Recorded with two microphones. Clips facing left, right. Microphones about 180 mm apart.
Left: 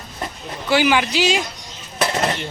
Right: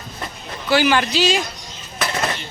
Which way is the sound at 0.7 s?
15° left (ahead or behind).